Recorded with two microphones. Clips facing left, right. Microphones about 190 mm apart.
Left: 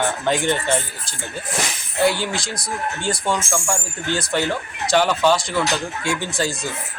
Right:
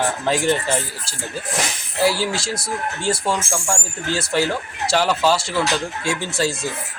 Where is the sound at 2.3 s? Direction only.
25° right (ahead or behind).